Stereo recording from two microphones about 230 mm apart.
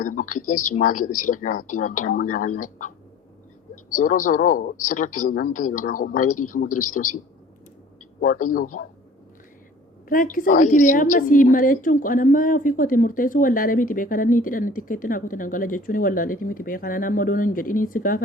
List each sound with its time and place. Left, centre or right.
0.0 s a woman's voice: left
3.9 s a woman's voice: left
8.2 s a woman's voice: left
10.1 s a woman's voice: left